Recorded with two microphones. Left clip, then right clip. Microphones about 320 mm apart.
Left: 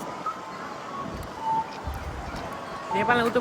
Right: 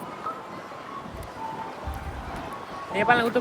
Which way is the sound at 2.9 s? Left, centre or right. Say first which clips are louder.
Right 2 dB; centre.